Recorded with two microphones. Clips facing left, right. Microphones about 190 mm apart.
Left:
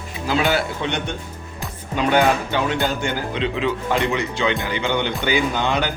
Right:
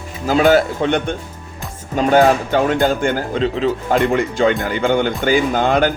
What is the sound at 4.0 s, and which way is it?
Speech, 50° right (ahead or behind).